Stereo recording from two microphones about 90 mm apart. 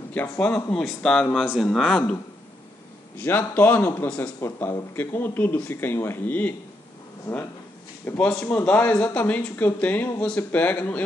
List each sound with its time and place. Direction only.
0.1 s speech: 15° left (ahead or behind)
1.4 s speech: 5° right (ahead or behind)
3.2 s speech: 25° left (ahead or behind)
8.0 s a man's voice: 20° left (ahead or behind)